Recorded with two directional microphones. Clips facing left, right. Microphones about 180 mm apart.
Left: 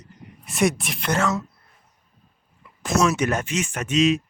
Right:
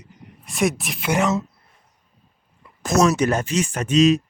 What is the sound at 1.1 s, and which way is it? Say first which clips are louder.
Speech: right 3 dB; 20° right (ahead or behind).